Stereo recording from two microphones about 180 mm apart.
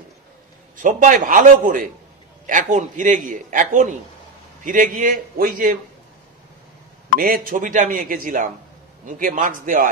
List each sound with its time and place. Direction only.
0.7 s a man's voice: 45° right (ahead or behind)
7.2 s a man's voice: 50° right (ahead or behind)